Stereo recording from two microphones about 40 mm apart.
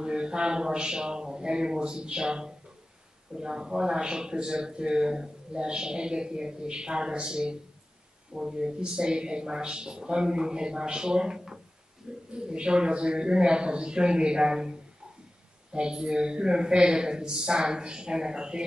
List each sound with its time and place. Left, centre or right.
0.0 s speech: right